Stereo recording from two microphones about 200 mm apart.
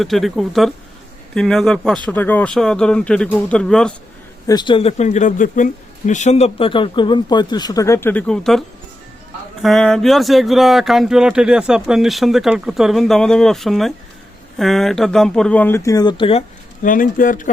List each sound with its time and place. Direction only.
0.0 s speech: centre (ahead or behind)
4.4 s speech: 20° left (ahead or behind)
16.8 s speech: 45° left (ahead or behind)